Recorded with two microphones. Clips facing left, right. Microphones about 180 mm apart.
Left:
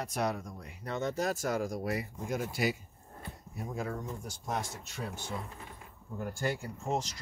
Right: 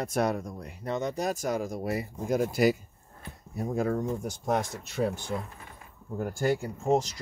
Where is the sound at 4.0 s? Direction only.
65° right (ahead or behind).